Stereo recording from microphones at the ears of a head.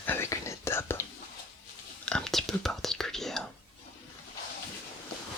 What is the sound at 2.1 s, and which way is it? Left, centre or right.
Whispering, centre.